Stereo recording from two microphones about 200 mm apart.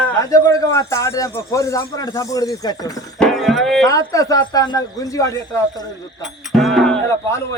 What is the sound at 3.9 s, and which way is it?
Speech, 15° left (ahead or behind).